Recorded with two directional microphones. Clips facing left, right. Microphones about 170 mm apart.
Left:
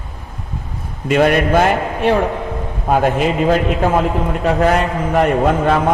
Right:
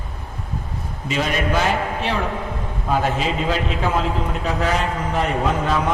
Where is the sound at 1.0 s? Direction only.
60° left (ahead or behind).